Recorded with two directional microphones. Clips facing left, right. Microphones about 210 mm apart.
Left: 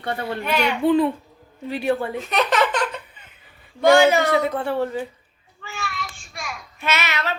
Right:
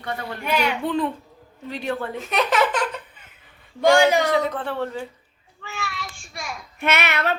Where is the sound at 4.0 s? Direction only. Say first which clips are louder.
Left 2 dB; 15° right (ahead or behind).